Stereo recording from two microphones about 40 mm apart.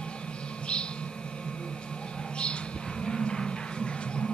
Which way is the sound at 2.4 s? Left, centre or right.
Left.